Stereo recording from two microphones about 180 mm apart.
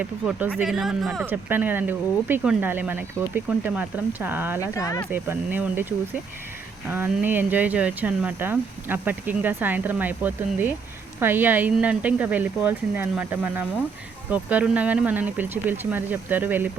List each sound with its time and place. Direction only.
0.0 s speech: 10° right (ahead or behind)
4.6 s speech: 20° left (ahead or behind)
5.1 s speech: 10° right (ahead or behind)